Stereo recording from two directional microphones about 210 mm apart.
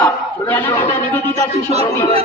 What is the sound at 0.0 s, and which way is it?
Chatter, 10° left (ahead or behind).